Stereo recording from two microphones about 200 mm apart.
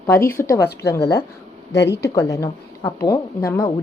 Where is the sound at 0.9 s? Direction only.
55° left (ahead or behind).